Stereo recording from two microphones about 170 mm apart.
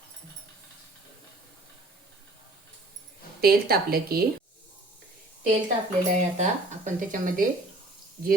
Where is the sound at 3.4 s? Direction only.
65° right (ahead or behind).